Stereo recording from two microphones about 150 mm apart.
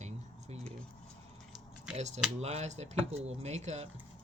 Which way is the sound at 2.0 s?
50° right (ahead or behind).